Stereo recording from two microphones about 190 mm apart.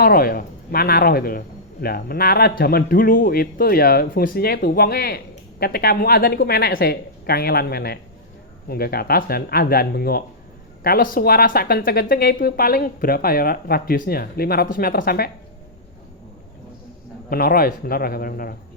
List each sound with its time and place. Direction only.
0.0 s a man's voice: 50° left (ahead or behind)
17.2 s a man's voice: 50° left (ahead or behind)